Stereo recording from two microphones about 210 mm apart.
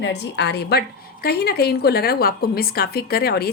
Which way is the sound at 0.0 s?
55° left (ahead or behind).